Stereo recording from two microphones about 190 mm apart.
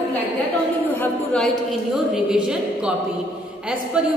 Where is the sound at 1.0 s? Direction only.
5° left (ahead or behind).